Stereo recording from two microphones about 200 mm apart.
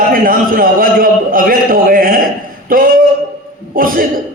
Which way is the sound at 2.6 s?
45° right (ahead or behind).